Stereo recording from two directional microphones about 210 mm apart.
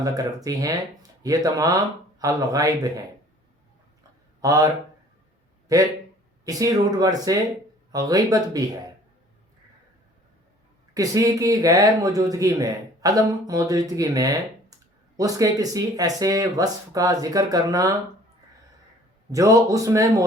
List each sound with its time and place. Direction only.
0.0 s speech: 15° right (ahead or behind)
4.4 s speech: 15° right (ahead or behind)
6.4 s speech: 15° right (ahead or behind)
10.9 s speech: 15° right (ahead or behind)
19.3 s speech: 15° right (ahead or behind)